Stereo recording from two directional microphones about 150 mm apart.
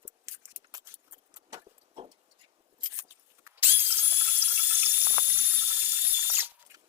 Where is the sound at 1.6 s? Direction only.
40° right (ahead or behind).